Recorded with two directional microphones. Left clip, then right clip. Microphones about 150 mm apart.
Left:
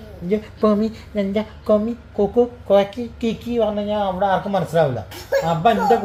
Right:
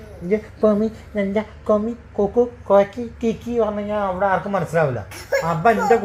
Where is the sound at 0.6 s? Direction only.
5° left (ahead or behind); by 4.8 s 15° right (ahead or behind).